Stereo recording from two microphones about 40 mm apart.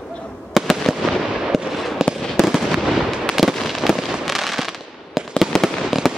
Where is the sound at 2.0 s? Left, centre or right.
Centre.